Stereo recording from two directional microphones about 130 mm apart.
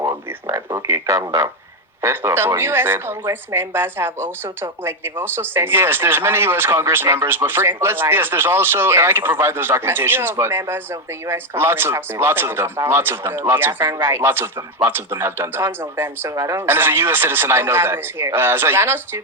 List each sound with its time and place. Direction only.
0.4 s speech: 25° right (ahead or behind)